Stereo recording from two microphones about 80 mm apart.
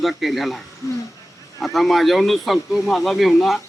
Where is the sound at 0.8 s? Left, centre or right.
Left.